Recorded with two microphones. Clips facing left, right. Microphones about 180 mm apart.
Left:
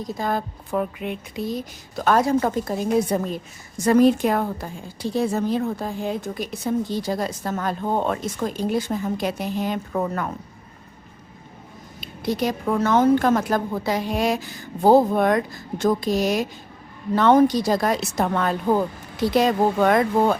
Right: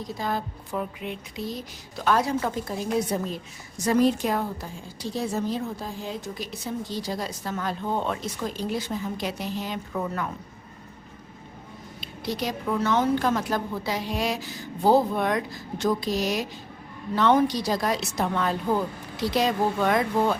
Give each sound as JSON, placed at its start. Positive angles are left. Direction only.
{"t": 0.2, "sound": "a woman's voice", "side_deg": 50}
{"t": 11.9, "sound": "a woman's voice", "side_deg": 50}